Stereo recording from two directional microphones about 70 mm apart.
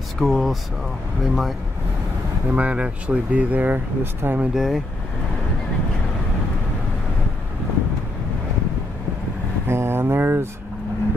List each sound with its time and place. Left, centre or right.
0.2 s speech: centre
2.5 s speech: centre
4.6 s speech: centre
9.7 s a sound: right